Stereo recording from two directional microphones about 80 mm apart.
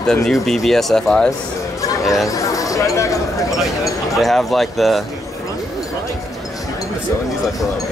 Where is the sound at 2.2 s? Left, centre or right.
Left.